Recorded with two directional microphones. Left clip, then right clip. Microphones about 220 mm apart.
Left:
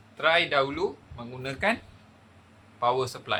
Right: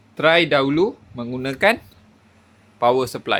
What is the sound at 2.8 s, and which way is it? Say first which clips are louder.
Speech: right 8 dB; 35° right (ahead or behind).